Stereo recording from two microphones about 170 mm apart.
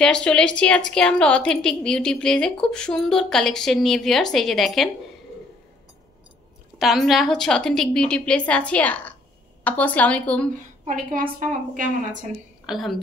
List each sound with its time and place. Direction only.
0.0 s a woman's voice: 5° left (ahead or behind)
6.8 s a woman's voice: centre (ahead or behind)
10.5 s a woman's voice: 50° right (ahead or behind)
12.6 s a woman's voice: centre (ahead or behind)